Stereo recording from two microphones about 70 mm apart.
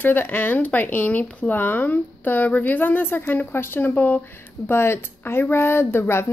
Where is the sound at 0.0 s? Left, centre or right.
Left.